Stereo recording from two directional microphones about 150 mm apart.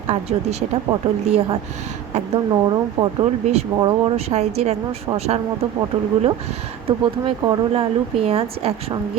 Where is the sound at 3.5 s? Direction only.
45° right (ahead or behind).